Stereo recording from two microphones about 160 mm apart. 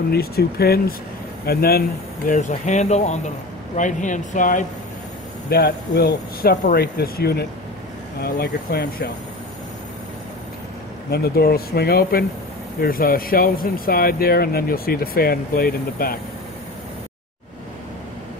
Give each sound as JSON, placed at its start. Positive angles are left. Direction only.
{"t": 0.1, "sound": "speech", "side_deg": 80}
{"t": 5.5, "sound": "speech", "side_deg": 85}
{"t": 6.6, "sound": "speech", "side_deg": 75}
{"t": 11.1, "sound": "speech", "side_deg": 80}